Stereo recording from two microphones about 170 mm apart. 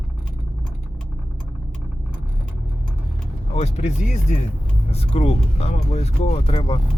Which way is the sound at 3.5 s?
40° left (ahead or behind).